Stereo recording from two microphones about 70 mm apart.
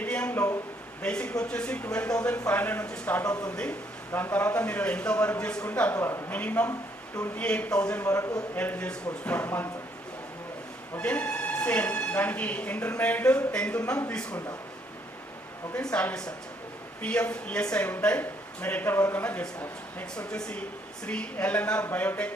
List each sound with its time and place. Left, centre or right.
0.0 s a sound: centre
0.3 s a sound: left
1.0 s a man's voice: centre
3.3 s speech: centre
4.1 s a man's voice: left
6.1 s speech: left
6.3 s a man's voice: left
10.9 s speech: centre
15.7 s a man's voice: centre